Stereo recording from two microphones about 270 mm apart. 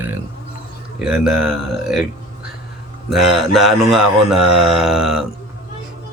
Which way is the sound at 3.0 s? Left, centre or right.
Centre.